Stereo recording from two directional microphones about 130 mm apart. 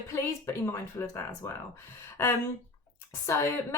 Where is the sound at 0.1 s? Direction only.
20° left (ahead or behind).